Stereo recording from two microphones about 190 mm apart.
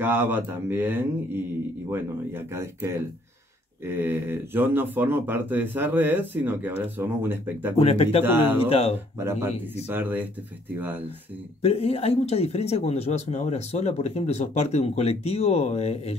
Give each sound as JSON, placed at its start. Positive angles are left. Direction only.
{"t": 0.0, "sound": "speech", "side_deg": -10}
{"t": 7.8, "sound": "speech", "side_deg": 30}
{"t": 8.2, "sound": "speech", "side_deg": -10}
{"t": 8.5, "sound": "speech", "side_deg": 30}
{"t": 9.2, "sound": "speech", "side_deg": -15}
{"t": 11.6, "sound": "speech", "side_deg": 30}